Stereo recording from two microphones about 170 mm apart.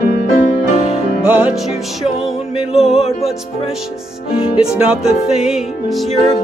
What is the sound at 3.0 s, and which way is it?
Music, 40° left (ahead or behind).